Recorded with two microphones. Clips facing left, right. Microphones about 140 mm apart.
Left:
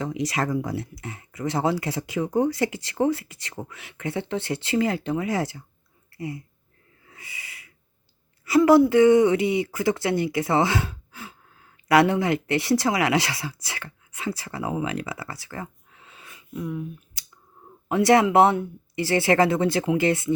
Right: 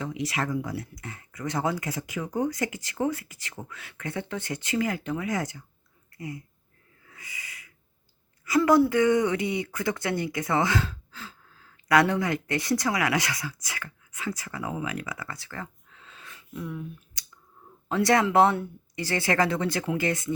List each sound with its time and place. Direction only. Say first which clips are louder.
0.0 s speech: left 4 dB; 40° left (ahead or behind)
1.0 s speech: left 5 dB; 20° left (ahead or behind)
3.7 s speech: left 4 dB; 20° left (ahead or behind)
8.4 s speech: left 4 dB; 25° left (ahead or behind); by 16.8 s 10° left (ahead or behind)
17.8 s speech: left 5 dB; 20° left (ahead or behind)